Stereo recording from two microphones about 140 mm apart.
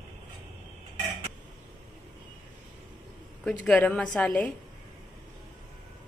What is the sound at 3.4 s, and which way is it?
A woman's voice, 10° left (ahead or behind).